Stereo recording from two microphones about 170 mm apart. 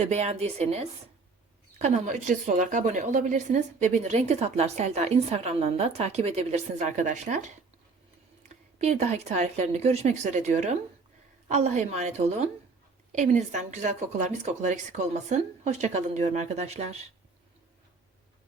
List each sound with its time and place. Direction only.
0.0 s a woman's voice: 40° right (ahead or behind)